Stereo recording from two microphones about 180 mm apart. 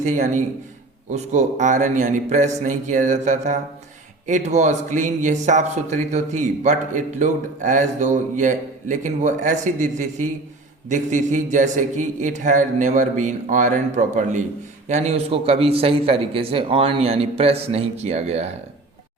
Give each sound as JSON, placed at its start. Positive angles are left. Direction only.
{"t": 0.0, "sound": "a man's voice", "side_deg": -45}